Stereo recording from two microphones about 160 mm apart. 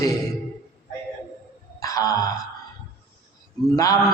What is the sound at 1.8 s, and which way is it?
Speech, 20° left (ahead or behind).